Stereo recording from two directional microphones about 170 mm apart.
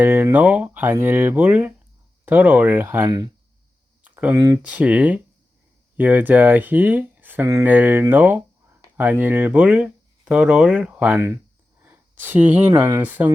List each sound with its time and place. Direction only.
0.0 s speech: 10° right (ahead or behind)